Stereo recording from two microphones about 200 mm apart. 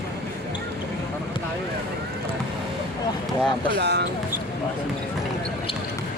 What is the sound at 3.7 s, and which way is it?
Speech, 55° right (ahead or behind).